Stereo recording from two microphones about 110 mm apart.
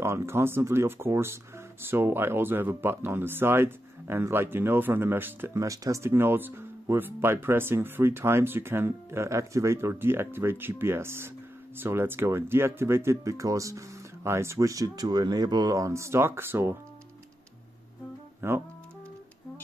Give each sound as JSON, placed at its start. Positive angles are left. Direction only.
{"t": 0.0, "sound": "speech", "side_deg": -25}
{"t": 18.4, "sound": "speech", "side_deg": -25}